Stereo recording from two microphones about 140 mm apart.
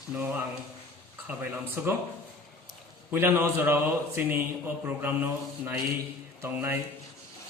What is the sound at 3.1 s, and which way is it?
A man's voice, 15° right (ahead or behind).